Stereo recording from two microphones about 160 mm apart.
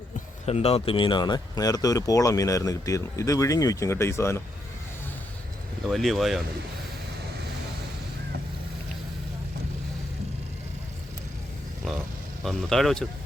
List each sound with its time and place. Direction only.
0.4 s speech: 40° left (ahead or behind); by 4.4 s 15° left (ahead or behind)
5.8 s speech: centre (ahead or behind)
11.8 s vehicle: centre (ahead or behind)
12.5 s speech: centre (ahead or behind)